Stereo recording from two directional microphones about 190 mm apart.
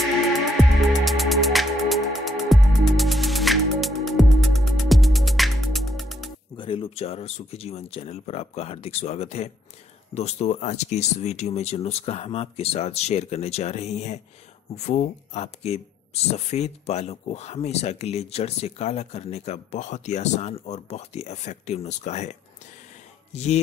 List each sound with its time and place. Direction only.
0.7 s music: centre (ahead or behind)
6.5 s speech: 25° left (ahead or behind)